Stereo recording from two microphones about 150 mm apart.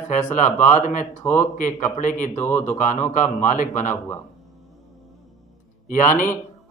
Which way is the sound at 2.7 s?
60° left (ahead or behind).